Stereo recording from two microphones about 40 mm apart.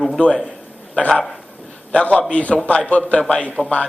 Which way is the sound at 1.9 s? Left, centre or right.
Left.